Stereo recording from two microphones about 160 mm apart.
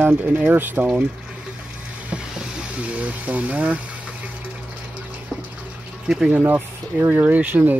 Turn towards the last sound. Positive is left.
turn(degrees=-10)  # may be behind; listen again after turning